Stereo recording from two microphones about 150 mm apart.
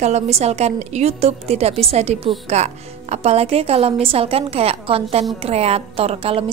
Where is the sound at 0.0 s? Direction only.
45° right (ahead or behind).